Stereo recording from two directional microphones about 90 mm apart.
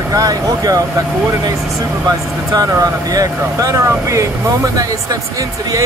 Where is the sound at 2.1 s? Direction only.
40° right (ahead or behind).